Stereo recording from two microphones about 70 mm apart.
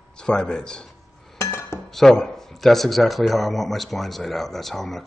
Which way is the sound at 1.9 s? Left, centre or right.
Centre.